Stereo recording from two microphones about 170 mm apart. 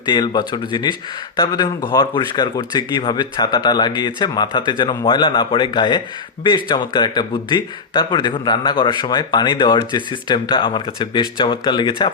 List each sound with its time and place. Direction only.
0.0 s speech: 25° left (ahead or behind)